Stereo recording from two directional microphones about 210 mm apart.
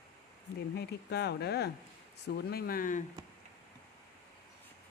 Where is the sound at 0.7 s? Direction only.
50° left (ahead or behind).